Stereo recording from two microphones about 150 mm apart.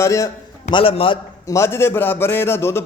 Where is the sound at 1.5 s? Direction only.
20° left (ahead or behind).